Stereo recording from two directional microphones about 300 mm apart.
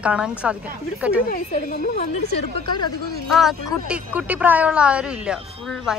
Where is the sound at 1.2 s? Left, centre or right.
Left.